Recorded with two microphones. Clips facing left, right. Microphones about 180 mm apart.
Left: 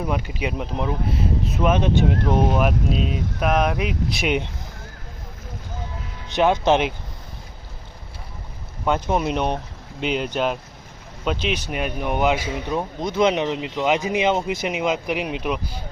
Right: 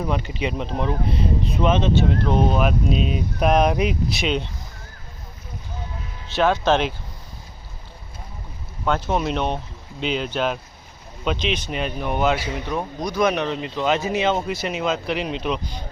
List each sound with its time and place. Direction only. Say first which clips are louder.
0.0 s speech: right 1 dB; 10° left (ahead or behind)
3.4 s speech: right 3 dB; 30° right (ahead or behind)
6.2 s speech: left 1 dB; 15° left (ahead or behind)
8.8 s speech: left 1 dB; 10° left (ahead or behind)